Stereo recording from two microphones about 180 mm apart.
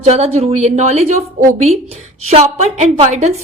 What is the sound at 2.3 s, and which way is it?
A woman's voice, 35° right (ahead or behind).